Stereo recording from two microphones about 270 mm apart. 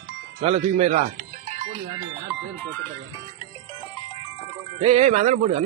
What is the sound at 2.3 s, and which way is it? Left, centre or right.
Speech, centre.